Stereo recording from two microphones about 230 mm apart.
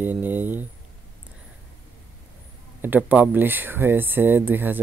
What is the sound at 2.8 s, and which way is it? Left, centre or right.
Speech, centre.